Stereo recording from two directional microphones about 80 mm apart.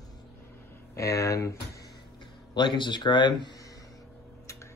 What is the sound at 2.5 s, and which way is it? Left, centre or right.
Speech, left.